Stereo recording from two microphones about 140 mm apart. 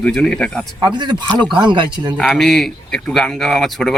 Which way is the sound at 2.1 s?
5° left (ahead or behind).